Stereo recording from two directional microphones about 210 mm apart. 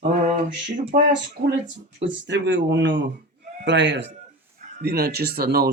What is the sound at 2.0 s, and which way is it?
Speech, 60° right (ahead or behind).